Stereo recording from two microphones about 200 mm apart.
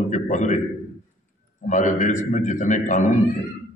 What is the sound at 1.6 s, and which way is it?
A man's voice, 40° left (ahead or behind).